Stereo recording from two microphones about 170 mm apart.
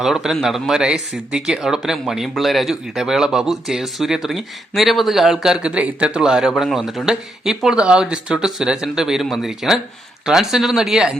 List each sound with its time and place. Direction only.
0.0 s speech: 5° right (ahead or behind)